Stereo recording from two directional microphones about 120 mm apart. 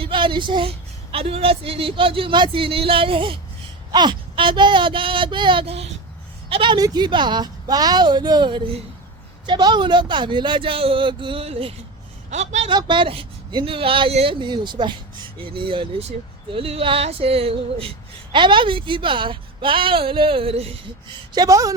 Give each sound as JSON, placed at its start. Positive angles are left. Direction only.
{"t": 0.0, "sound": "speech", "side_deg": -45}
{"t": 1.1, "sound": "speech", "side_deg": -55}
{"t": 5.6, "sound": "a child's voice", "side_deg": -60}
{"t": 6.5, "sound": "speech", "side_deg": -40}
{"t": 12.3, "sound": "a man's voice", "side_deg": -70}
{"t": 12.6, "sound": "speech", "side_deg": -45}
{"t": 14.3, "sound": "speech", "side_deg": -40}
{"t": 21.3, "sound": "speech", "side_deg": -30}